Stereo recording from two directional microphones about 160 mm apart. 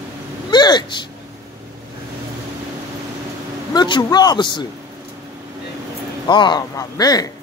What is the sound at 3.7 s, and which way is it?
Speech, 25° left (ahead or behind).